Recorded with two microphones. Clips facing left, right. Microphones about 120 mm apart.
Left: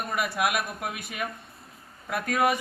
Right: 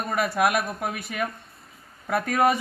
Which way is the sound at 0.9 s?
Centre (ahead or behind).